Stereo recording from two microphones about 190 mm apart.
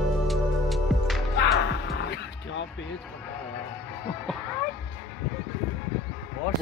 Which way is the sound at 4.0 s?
10° left (ahead or behind).